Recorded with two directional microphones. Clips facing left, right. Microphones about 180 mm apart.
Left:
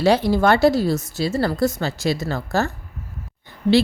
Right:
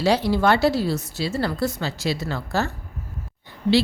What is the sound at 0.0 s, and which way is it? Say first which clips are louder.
A woman's voice: left 3 dB; 50° left (ahead or behind).